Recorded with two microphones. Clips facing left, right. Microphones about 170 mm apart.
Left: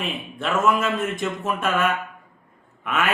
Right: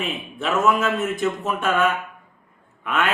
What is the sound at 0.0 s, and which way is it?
A man's voice, centre (ahead or behind).